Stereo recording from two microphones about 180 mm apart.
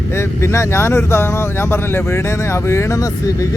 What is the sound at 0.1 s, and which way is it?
Speech, 15° left (ahead or behind).